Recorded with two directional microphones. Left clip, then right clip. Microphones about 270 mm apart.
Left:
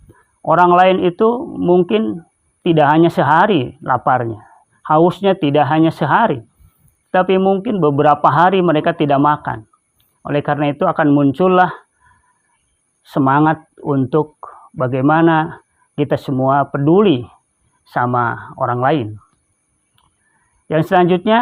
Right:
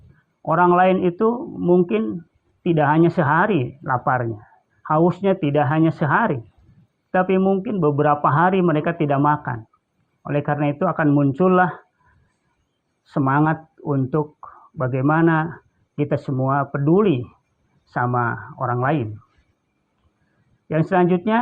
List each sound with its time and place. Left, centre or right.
0.4 s speech: left
13.0 s speech: left
20.7 s speech: left